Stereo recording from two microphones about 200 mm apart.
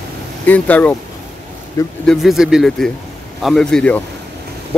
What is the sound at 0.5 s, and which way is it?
Speech, 5° left (ahead or behind).